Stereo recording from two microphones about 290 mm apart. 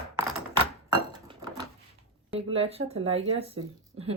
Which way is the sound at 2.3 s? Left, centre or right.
Centre.